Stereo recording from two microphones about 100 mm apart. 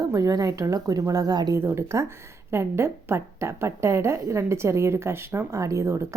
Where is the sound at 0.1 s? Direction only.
35° right (ahead or behind).